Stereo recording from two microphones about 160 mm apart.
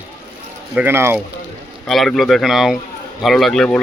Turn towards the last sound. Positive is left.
turn(degrees=5)  # may be behind; listen again after turning